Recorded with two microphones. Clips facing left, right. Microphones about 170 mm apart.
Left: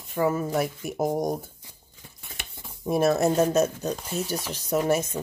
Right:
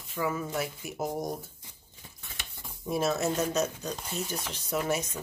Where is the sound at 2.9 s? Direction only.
55° left (ahead or behind).